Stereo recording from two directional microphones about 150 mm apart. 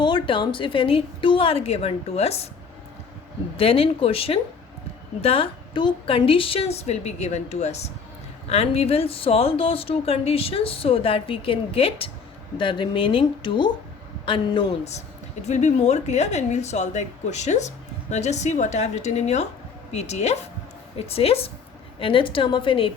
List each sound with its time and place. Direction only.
0.0 s speech: 35° left (ahead or behind)
3.6 s a woman's voice: 40° left (ahead or behind)
15.4 s a woman's voice: 50° left (ahead or behind)